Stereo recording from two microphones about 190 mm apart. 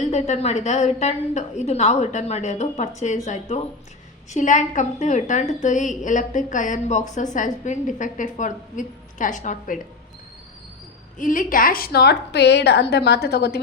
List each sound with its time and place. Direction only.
0.1 s a woman's voice: 35° left (ahead or behind)
11.2 s a woman's voice: 45° left (ahead or behind); by 13.6 s 60° left (ahead or behind)